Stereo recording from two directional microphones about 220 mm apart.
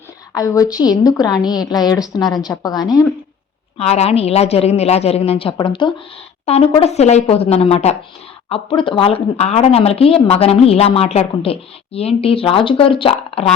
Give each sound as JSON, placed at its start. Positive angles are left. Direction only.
{"t": 0.3, "sound": "a woman's voice", "side_deg": 15}
{"t": 3.8, "sound": "a woman's voice", "side_deg": 30}